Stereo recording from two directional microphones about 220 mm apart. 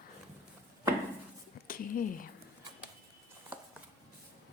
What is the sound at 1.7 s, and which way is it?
Speech, 40° left (ahead or behind).